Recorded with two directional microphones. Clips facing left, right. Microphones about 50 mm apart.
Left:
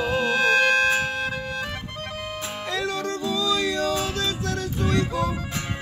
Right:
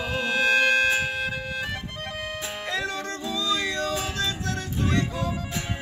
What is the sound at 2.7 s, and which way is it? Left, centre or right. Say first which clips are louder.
Music: left 3 dB; right.